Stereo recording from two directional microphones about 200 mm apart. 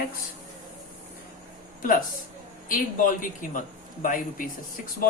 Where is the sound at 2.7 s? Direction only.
40° left (ahead or behind).